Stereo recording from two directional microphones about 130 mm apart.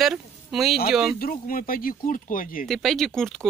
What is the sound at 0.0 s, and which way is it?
Speech, centre (ahead or behind).